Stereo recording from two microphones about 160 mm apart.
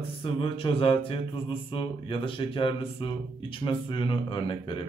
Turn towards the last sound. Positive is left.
turn(degrees=30)  # may be behind; listen again after turning